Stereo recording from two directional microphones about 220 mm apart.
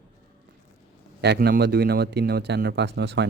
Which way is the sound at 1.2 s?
50° right (ahead or behind).